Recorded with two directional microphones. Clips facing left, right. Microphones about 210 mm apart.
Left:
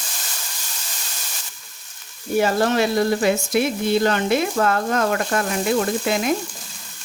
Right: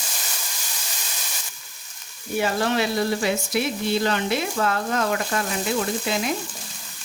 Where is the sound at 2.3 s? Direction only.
45° left (ahead or behind).